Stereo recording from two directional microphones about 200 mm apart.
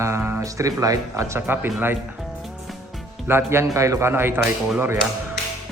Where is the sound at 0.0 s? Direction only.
10° right (ahead or behind).